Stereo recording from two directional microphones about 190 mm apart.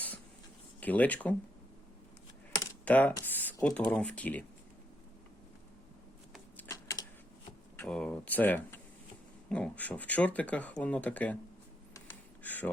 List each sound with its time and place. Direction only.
0.8 s speech: 10° left (ahead or behind)
2.6 s typing: 10° left (ahead or behind)
3.2 s speech: 10° left (ahead or behind)
6.6 s typewriter: 15° left (ahead or behind)
7.8 s speech: 5° left (ahead or behind)
11.9 s computer keyboard: 10° left (ahead or behind)